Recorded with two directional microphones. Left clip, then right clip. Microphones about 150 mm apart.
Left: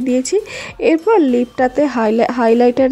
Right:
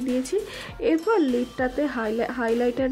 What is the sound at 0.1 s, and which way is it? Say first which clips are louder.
Speech: left 10 dB; 40° left (ahead or behind).